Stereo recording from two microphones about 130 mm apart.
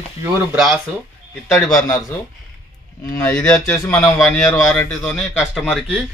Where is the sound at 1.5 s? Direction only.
10° left (ahead or behind).